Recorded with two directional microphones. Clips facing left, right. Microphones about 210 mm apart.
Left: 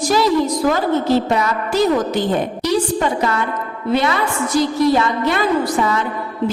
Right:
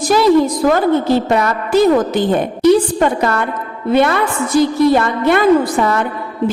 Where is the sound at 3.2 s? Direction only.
55° right (ahead or behind).